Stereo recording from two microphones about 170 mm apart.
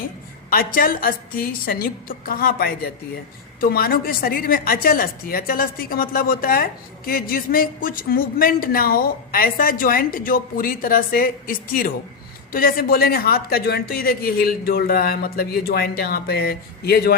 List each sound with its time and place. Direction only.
0.5 s a woman's voice: 55° left (ahead or behind)